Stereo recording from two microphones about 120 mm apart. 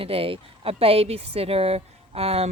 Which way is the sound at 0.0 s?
50° right (ahead or behind).